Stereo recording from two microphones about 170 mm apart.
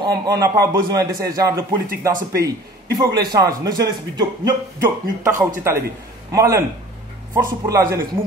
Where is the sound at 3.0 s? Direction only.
20° right (ahead or behind).